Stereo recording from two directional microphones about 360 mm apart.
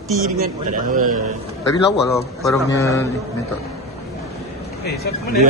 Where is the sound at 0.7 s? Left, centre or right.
Right.